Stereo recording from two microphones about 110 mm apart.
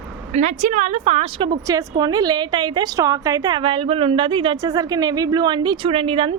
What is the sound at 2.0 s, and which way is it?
A woman's voice, 40° right (ahead or behind).